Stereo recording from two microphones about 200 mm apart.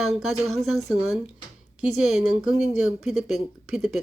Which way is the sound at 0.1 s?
Centre (ahead or behind).